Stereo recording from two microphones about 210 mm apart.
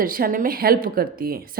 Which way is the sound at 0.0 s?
45° right (ahead or behind).